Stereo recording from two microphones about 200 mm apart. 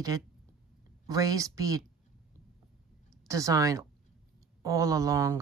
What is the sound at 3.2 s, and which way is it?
Speech, 15° right (ahead or behind).